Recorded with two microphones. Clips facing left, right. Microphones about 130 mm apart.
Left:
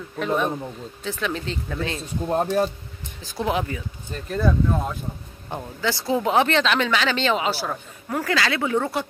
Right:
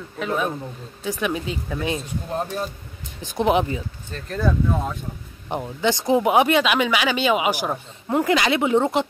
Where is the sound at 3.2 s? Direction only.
20° right (ahead or behind).